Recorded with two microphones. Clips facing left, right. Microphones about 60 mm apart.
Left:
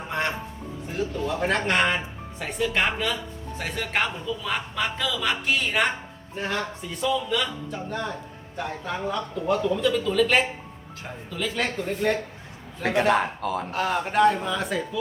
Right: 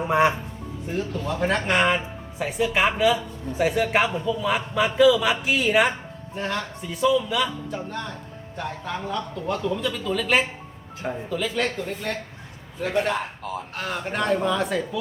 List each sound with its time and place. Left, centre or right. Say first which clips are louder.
0.1 s speech: right 8 dB; centre
0.9 s speech: even; centre
13.0 s speech: left 4 dB; left
13.7 s speech: left 6 dB; centre